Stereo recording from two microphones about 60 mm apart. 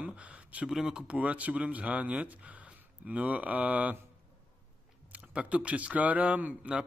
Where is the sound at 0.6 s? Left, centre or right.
Centre.